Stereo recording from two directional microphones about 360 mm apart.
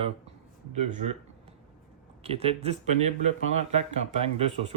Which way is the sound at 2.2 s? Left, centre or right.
Centre.